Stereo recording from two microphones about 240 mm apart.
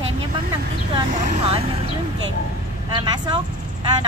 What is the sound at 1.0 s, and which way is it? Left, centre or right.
Speech, right.